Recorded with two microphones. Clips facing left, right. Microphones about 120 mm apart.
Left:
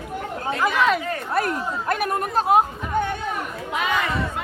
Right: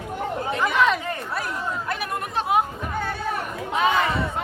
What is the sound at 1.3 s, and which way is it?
Speech, 50° left (ahead or behind).